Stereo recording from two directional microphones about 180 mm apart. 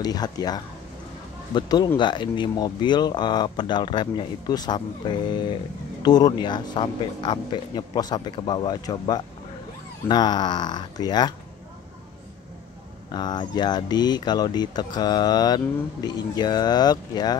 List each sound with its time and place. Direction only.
0.0 s speech: 20° left (ahead or behind)
13.1 s speech: 25° left (ahead or behind)